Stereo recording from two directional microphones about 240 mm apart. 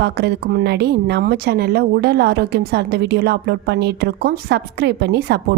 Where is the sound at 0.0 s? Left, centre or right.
Right.